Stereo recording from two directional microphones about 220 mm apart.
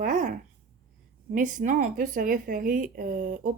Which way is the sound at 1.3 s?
35° right (ahead or behind).